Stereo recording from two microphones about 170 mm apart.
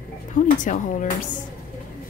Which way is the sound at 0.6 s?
50° left (ahead or behind).